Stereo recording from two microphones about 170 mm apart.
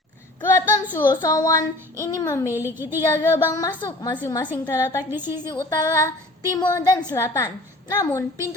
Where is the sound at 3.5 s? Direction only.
20° left (ahead or behind).